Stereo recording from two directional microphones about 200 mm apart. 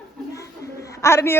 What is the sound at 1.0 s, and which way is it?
Speech, 10° left (ahead or behind).